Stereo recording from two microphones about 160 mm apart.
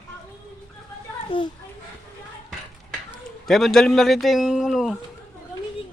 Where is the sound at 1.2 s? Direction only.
30° left (ahead or behind).